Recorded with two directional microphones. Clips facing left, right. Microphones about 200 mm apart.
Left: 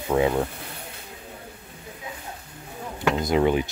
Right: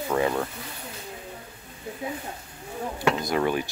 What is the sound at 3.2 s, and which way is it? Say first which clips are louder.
Speech: left 4 dB; 20° left (ahead or behind).